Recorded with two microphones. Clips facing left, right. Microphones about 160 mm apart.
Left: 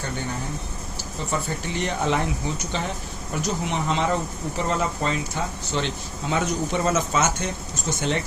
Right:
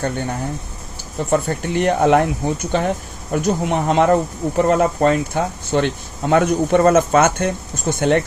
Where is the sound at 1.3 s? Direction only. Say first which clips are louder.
Right 9 dB; 55° right (ahead or behind).